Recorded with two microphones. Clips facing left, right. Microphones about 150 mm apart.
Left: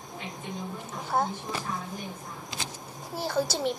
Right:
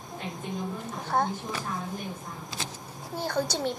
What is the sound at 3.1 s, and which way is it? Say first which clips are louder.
Speech: left 1 dB; 10° left (ahead or behind).